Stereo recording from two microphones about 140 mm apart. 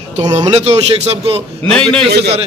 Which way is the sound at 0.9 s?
45° right (ahead or behind).